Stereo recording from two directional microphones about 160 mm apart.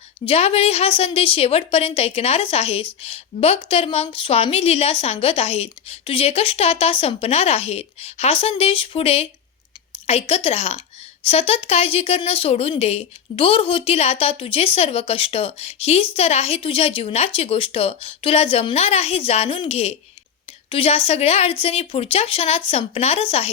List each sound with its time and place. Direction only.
0.3 s a woman's voice: 40° left (ahead or behind)